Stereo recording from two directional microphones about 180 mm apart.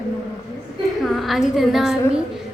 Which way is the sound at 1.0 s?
Centre (ahead or behind).